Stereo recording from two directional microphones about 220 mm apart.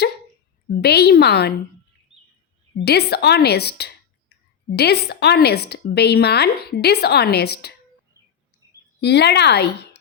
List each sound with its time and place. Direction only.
0.7 s a woman's voice: 50° left (ahead or behind)
2.7 s a woman's voice: 45° left (ahead or behind)
9.0 s a woman's voice: 50° left (ahead or behind)